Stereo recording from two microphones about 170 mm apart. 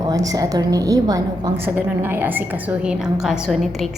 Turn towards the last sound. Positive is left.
turn(degrees=0)  # may be behind; listen again after turning